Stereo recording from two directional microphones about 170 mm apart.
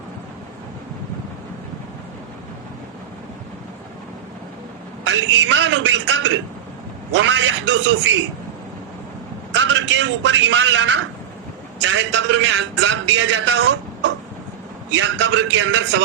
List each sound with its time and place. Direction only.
5.0 s a man's voice: 90° right
9.5 s a man's voice: 90° right